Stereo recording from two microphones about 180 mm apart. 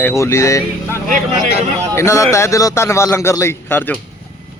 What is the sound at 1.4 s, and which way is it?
Speech, 35° right (ahead or behind).